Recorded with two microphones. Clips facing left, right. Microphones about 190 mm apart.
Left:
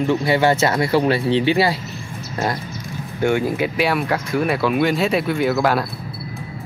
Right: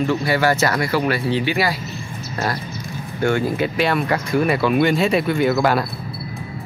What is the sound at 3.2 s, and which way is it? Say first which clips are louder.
Speech: left 1 dB; 15° left (ahead or behind).